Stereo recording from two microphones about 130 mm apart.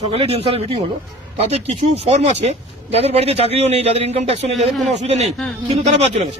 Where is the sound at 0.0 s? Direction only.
50° right (ahead or behind).